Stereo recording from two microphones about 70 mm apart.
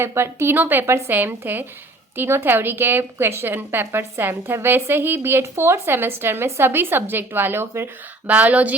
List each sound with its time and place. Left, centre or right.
0.0 s a woman's voice: right
0.5 s a woman's voice: right
8.3 s speech: right